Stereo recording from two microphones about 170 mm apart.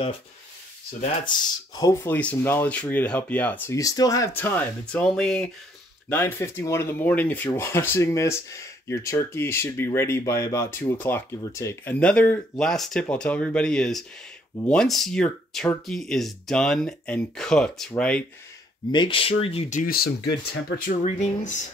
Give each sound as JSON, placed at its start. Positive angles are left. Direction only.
{"t": 1.2, "sound": "speech", "side_deg": 25}
{"t": 18.9, "sound": "speech", "side_deg": 30}